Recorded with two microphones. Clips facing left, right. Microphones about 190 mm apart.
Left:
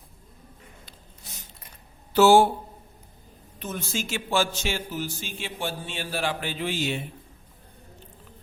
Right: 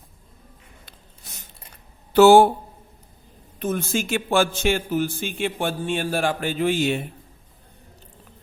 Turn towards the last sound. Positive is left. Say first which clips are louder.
# right 7 dB
turn(degrees=-55)  # may be behind; listen again after turning